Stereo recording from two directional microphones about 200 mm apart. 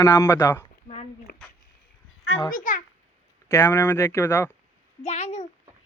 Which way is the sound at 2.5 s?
40° left (ahead or behind).